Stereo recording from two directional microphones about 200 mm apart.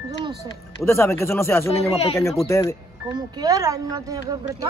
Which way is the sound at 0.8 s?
15° left (ahead or behind).